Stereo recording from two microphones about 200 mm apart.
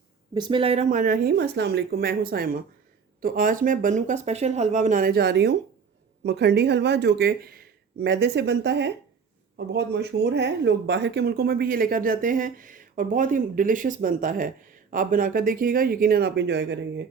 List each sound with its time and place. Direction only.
0.3 s speech: 25° right (ahead or behind); by 17.1 s 60° right (ahead or behind)